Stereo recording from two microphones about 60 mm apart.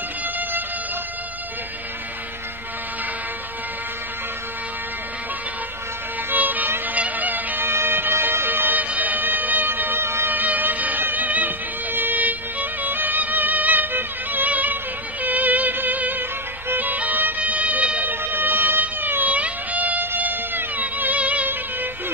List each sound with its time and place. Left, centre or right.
0.4 s music: right
6.3 s music: right